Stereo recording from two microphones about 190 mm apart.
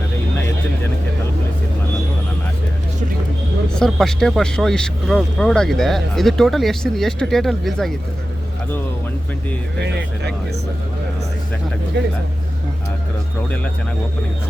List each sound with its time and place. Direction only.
3.8 s speech: centre (ahead or behind)
9.8 s speech: 60° right (ahead or behind)